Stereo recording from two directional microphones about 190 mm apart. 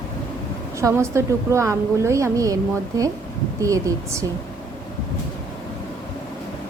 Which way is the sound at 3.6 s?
15° right (ahead or behind).